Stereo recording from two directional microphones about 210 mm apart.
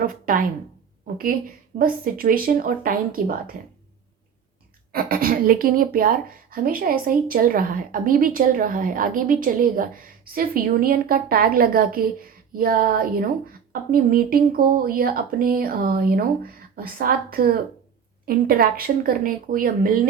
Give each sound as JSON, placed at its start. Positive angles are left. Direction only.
{"t": 0.0, "sound": "a woman's voice", "side_deg": -40}
{"t": 4.9, "sound": "a woman's voice", "side_deg": -45}